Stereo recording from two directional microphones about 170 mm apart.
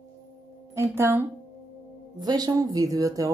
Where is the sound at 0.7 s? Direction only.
15° right (ahead or behind).